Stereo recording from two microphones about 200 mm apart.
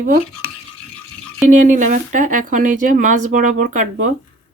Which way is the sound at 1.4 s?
40° right (ahead or behind).